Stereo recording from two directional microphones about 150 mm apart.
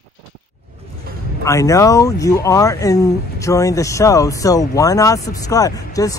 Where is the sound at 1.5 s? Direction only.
20° left (ahead or behind).